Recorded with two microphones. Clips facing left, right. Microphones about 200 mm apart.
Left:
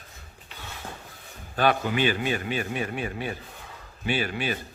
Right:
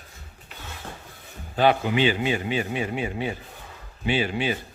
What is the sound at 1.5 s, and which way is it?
A man's voice, 20° right (ahead or behind).